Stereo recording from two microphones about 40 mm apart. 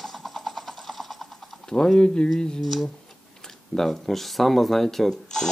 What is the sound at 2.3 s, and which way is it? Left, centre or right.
Speech, centre.